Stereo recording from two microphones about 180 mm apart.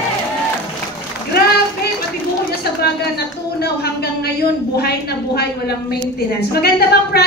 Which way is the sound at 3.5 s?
60° left (ahead or behind).